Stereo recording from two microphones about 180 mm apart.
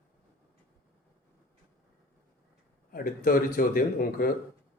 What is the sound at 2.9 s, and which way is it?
Speech, 50° left (ahead or behind).